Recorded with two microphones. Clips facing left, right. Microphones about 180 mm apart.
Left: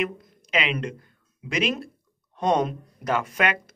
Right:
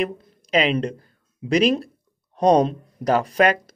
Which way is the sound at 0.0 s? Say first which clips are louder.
Right 3 dB; 35° right (ahead or behind).